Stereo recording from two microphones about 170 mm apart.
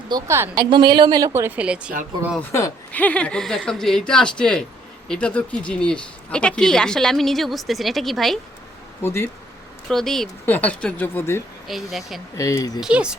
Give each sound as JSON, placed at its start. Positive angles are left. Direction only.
{"t": 0.1, "sound": "a woman's voice", "side_deg": -15}
{"t": 2.4, "sound": "speech", "side_deg": 15}
{"t": 9.0, "sound": "speech", "side_deg": 15}
{"t": 9.9, "sound": "speech", "side_deg": 5}
{"t": 11.7, "sound": "speech", "side_deg": 0}
{"t": 12.4, "sound": "speech", "side_deg": 20}
{"t": 12.8, "sound": "speech", "side_deg": -5}